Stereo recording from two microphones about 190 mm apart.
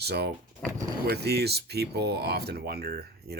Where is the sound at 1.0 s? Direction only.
60° right (ahead or behind).